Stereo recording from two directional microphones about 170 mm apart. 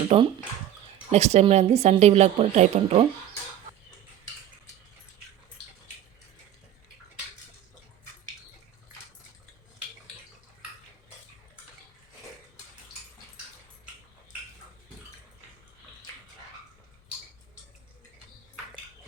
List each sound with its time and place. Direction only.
0.1 s speech: 40° right (ahead or behind)